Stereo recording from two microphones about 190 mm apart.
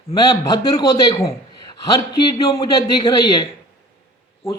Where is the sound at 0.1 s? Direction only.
20° left (ahead or behind).